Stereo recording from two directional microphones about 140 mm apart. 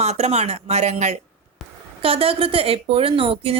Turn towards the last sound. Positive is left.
turn(degrees=-40)  # may be behind; listen again after turning